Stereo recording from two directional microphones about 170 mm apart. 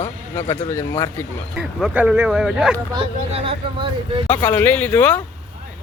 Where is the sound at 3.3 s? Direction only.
35° right (ahead or behind).